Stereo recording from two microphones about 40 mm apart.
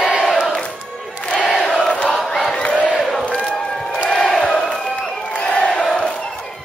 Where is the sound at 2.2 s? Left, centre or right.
Centre.